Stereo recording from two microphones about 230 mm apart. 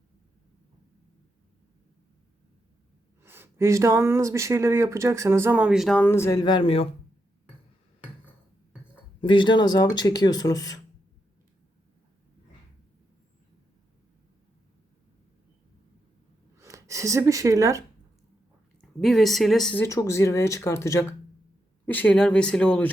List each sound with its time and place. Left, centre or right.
3.2 s speech: centre; by 6.8 s left
9.2 s speech: left
16.6 s speech: centre
18.8 s speech: centre